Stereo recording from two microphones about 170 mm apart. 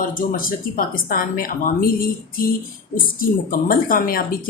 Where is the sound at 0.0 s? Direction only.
55° left (ahead or behind).